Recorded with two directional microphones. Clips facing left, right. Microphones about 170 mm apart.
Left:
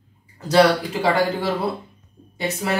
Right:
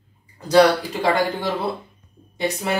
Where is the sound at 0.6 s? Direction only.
10° left (ahead or behind).